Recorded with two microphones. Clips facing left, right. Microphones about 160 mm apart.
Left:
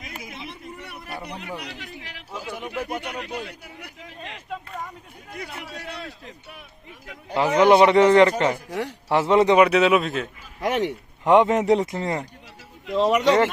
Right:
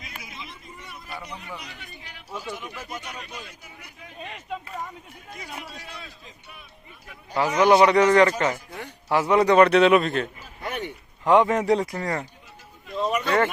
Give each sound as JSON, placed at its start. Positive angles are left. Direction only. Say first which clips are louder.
{"t": 0.3, "sound": "a sound", "louder": "left 5 dB", "side_deg": 65}
{"t": 1.2, "sound": "a man's voice", "louder": "left 4 dB", "side_deg": 65}
{"t": 2.6, "sound": "speech", "louder": "left 7 dB", "side_deg": 65}
{"t": 4.4, "sound": "a sound", "louder": "even", "side_deg": 0}
{"t": 5.7, "sound": "a man's voice", "louder": "left 6 dB", "side_deg": 65}
{"t": 7.6, "sound": "speech", "louder": "left 2 dB", "side_deg": 25}
{"t": 8.5, "sound": "speech", "louder": "left 9 dB", "side_deg": 85}
{"t": 9.0, "sound": "speech", "louder": "left 2 dB", "side_deg": 25}
{"t": 9.6, "sound": "speech", "louder": "right 1 dB", "side_deg": 5}
{"t": 10.6, "sound": "speech", "louder": "left 8 dB", "side_deg": 90}
{"t": 11.2, "sound": "speech", "louder": "left 2 dB", "side_deg": 20}
{"t": 12.9, "sound": "speech", "louder": "left 7 dB", "side_deg": 80}